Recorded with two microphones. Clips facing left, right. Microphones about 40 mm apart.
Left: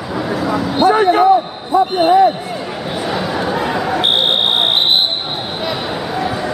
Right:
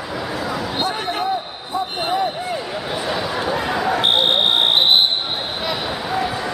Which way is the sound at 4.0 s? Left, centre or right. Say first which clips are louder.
Left 2 dB; left.